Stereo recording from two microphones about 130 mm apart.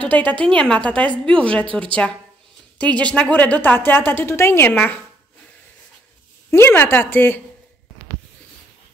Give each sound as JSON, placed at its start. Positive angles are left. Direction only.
{"t": 0.0, "sound": "a woman's voice", "side_deg": 10}
{"t": 6.5, "sound": "a woman's voice", "side_deg": 15}